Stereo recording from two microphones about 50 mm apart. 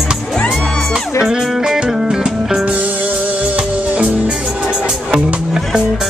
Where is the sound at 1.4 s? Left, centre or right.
Centre.